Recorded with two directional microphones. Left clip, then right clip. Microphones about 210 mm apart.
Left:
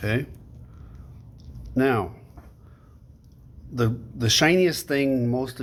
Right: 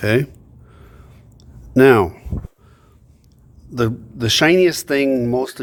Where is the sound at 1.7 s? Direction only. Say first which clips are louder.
Right 12 dB; 50° right (ahead or behind).